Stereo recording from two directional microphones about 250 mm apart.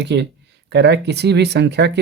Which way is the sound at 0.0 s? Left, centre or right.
Right.